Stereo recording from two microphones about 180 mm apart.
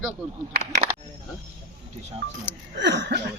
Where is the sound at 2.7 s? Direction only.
75° right (ahead or behind).